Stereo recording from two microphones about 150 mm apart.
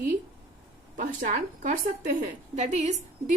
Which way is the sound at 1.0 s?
65° right (ahead or behind).